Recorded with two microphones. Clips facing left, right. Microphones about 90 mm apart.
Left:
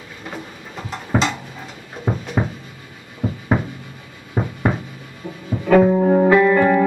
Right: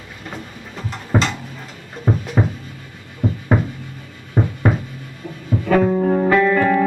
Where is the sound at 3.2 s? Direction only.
Centre (ahead or behind).